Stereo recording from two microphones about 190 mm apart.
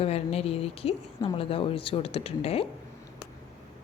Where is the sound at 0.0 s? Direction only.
30° left (ahead or behind).